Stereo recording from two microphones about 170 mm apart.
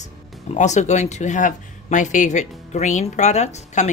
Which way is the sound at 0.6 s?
45° left (ahead or behind).